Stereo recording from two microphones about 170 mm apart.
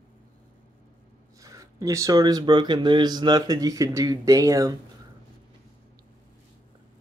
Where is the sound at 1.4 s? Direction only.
20° right (ahead or behind).